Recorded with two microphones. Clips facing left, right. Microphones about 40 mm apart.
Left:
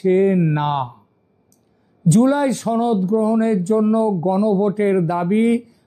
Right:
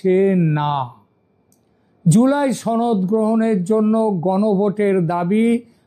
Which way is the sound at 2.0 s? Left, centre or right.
Centre.